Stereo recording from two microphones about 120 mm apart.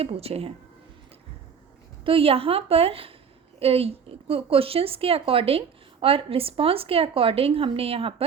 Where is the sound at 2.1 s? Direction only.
50° right (ahead or behind).